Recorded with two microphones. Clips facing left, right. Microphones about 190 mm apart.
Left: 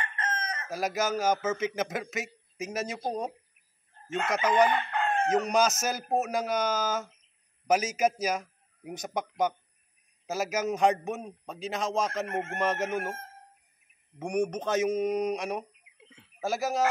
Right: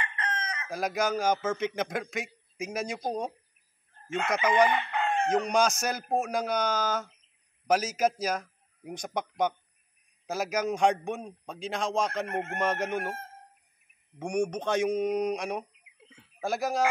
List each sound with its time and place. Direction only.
0.0 s chicken: 50° left (ahead or behind)
0.7 s a man's voice: 5° left (ahead or behind)
4.6 s chicken: 10° right (ahead or behind)
5.3 s a man's voice: 5° left (ahead or behind)
14.1 s speech: centre (ahead or behind)